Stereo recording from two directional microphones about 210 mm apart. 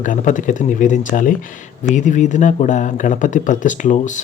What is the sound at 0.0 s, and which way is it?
Speech, 35° left (ahead or behind).